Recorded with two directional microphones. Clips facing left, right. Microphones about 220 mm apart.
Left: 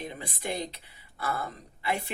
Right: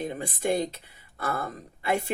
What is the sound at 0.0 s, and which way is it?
Speech, 45° right (ahead or behind).